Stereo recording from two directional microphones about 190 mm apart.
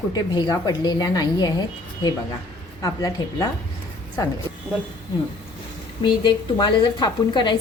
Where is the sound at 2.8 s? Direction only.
20° left (ahead or behind).